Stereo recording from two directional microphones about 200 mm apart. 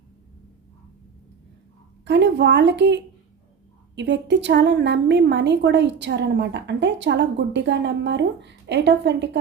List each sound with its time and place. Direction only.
2.0 s a woman's voice: 60° right (ahead or behind)